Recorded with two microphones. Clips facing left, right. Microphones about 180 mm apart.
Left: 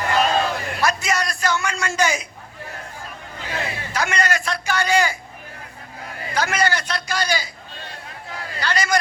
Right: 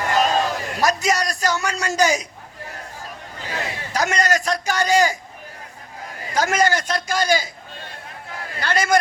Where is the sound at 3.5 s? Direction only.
40° right (ahead or behind).